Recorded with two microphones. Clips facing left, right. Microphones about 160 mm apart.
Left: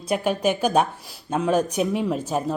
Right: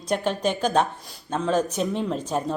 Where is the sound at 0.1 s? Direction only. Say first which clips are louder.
Left 2 dB; 10° left (ahead or behind).